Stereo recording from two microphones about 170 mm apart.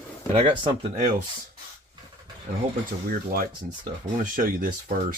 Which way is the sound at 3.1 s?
60° right (ahead or behind).